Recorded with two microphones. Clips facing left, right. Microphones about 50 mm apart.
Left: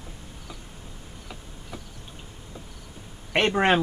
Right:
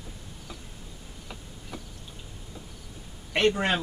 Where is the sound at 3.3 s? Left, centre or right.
Left.